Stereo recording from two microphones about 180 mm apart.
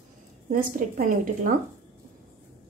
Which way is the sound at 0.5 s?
50° right (ahead or behind).